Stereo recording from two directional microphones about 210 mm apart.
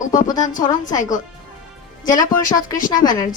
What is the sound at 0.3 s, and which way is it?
Speech, 15° left (ahead or behind).